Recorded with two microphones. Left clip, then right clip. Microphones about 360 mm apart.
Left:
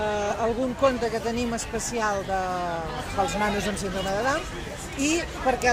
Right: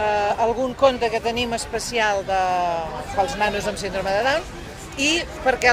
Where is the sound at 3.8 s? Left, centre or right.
Right.